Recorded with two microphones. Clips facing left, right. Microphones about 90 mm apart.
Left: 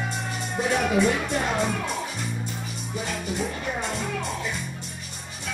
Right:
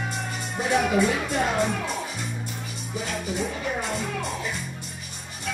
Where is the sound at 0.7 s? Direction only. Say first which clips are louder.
Right 1 dB; centre (ahead or behind).